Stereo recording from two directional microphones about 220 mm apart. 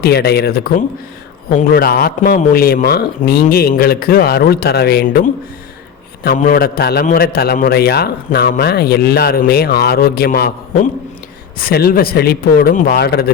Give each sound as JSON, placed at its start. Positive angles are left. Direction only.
{"t": 0.0, "sound": "a man's voice", "side_deg": 45}